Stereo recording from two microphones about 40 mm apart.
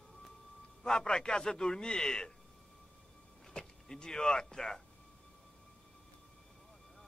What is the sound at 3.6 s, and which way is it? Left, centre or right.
Speech, centre.